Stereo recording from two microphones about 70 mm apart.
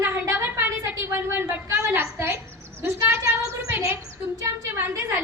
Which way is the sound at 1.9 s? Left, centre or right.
Right.